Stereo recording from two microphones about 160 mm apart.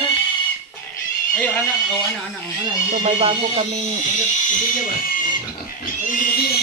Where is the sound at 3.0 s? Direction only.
40° right (ahead or behind).